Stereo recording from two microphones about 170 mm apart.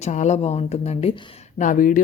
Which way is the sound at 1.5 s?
50° left (ahead or behind).